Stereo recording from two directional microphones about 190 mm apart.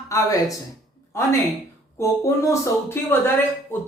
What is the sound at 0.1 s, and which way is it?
Speech, 15° left (ahead or behind).